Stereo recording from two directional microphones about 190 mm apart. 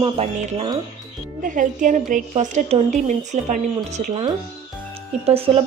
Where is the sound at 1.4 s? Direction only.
45° right (ahead or behind).